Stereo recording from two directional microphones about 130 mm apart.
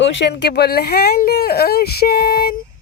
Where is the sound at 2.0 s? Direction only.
90° left.